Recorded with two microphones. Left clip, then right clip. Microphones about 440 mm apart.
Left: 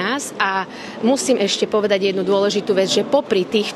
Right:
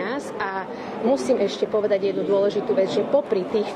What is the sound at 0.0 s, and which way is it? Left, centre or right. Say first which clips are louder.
A woman's voice: left 6 dB; left.